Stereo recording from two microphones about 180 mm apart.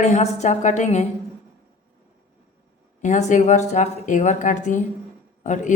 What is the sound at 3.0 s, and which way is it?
A woman's voice, 40° left (ahead or behind).